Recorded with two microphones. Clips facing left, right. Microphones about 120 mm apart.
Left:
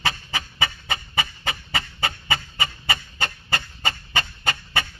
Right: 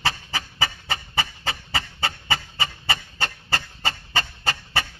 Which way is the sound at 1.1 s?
30° right (ahead or behind).